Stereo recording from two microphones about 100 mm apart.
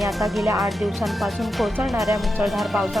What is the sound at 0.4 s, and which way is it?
Speech, 35° right (ahead or behind).